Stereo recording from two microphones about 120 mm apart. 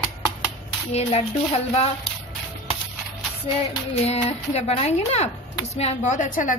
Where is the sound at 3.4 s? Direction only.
50° left (ahead or behind).